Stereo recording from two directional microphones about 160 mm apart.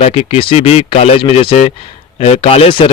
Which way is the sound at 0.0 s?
40° left (ahead or behind).